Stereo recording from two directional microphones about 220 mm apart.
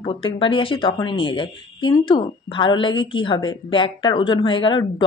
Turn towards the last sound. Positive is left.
turn(degrees=20)  # may be behind; listen again after turning